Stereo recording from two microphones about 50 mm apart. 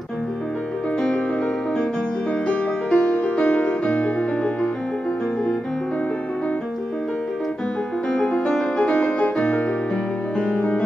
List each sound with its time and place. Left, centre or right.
2.4 s music: left
8.9 s music: left
10.4 s music: left